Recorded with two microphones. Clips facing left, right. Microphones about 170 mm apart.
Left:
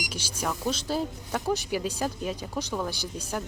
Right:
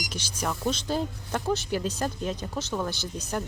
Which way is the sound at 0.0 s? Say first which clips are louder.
Even; 10° left (ahead or behind).